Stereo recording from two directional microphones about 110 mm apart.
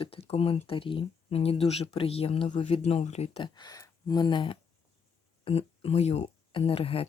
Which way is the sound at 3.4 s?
40° left (ahead or behind).